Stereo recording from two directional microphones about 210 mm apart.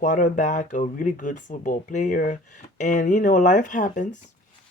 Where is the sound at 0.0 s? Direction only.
35° left (ahead or behind).